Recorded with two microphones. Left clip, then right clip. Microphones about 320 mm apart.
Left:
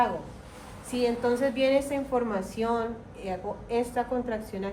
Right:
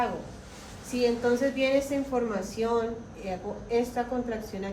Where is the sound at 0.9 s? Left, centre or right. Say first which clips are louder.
Right 1 dB; left.